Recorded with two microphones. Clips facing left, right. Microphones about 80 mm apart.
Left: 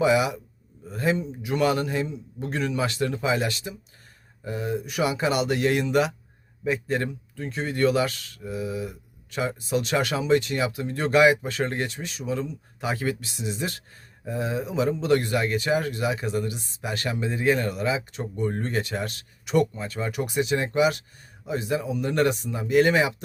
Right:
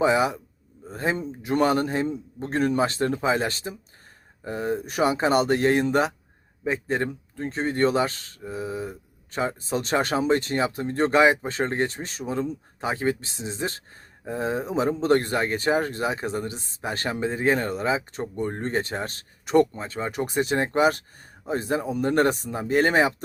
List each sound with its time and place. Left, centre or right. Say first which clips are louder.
0.0 s speech: even; right